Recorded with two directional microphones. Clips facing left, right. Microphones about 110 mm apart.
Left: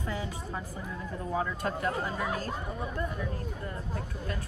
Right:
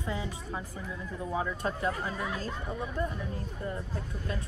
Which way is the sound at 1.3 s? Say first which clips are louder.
Left 1 dB; 20° right (ahead or behind).